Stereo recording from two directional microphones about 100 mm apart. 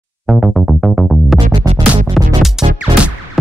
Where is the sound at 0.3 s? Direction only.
Centre (ahead or behind).